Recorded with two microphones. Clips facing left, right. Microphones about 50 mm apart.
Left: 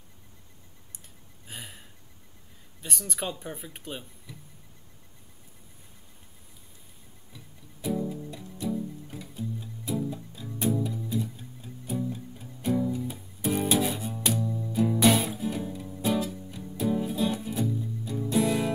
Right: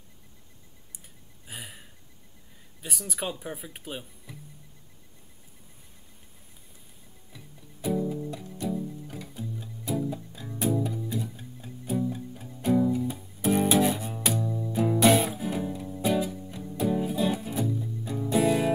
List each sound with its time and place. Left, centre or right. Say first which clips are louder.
1.5 s a sound: right 1 dB; centre
2.8 s speech: even; centre
7.8 s music: right 2 dB; centre
8.3 s music: right 1 dB; centre
10.0 s music: right 1 dB; centre
11.3 s music: right 1 dB; centre
18.2 s music: right 2 dB; centre